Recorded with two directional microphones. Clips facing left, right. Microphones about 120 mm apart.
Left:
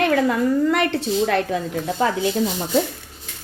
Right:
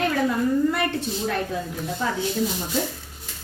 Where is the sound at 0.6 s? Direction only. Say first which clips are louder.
Left 4 dB; 90° left.